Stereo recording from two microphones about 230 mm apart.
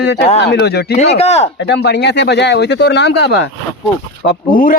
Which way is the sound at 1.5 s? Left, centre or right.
Left.